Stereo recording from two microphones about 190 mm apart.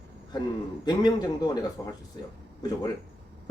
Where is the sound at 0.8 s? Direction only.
20° left (ahead or behind).